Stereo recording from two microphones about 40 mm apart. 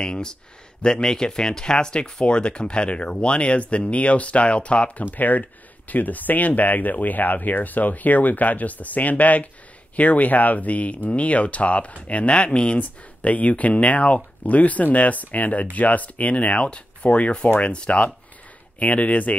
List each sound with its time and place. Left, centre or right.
0.0 s speech: left
5.1 s speech: left